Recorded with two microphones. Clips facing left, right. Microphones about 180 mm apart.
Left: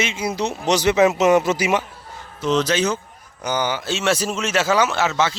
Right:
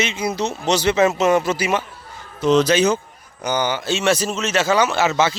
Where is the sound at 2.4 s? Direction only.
10° right (ahead or behind).